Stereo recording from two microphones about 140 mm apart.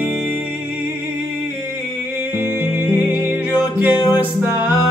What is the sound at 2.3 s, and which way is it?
Music, 15° right (ahead or behind).